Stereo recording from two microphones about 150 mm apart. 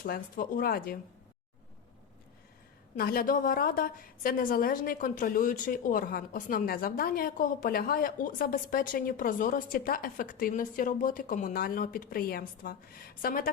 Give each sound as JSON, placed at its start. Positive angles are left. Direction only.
{"t": 0.0, "sound": "a woman's voice", "side_deg": 65}
{"t": 3.0, "sound": "a woman's voice", "side_deg": 75}